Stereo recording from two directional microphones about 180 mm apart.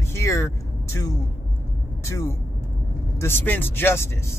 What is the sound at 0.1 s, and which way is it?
Vehicle, 15° left (ahead or behind).